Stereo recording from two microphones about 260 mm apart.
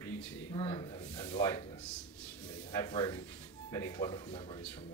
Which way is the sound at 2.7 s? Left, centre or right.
Centre.